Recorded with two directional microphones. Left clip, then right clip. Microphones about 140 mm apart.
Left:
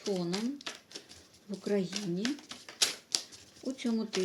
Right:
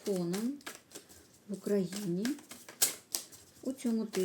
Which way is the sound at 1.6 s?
25° right (ahead or behind).